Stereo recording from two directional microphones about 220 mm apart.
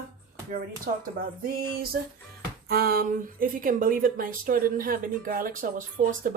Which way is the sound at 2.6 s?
45° right (ahead or behind).